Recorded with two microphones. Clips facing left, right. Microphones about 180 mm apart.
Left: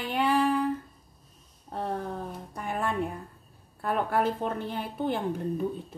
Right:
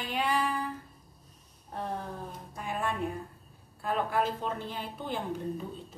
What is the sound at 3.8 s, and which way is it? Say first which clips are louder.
A woman's voice: left 3 dB; 55° left (ahead or behind).